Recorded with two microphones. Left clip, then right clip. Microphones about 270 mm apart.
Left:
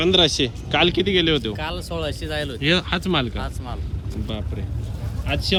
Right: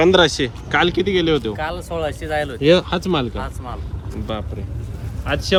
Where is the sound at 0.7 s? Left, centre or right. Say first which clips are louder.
Right 2 dB; centre.